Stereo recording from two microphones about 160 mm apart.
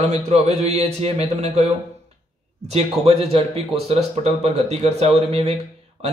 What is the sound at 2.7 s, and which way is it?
A man's voice, 40° right (ahead or behind).